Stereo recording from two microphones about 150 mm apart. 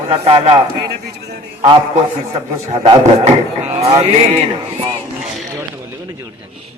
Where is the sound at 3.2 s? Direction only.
50° right (ahead or behind).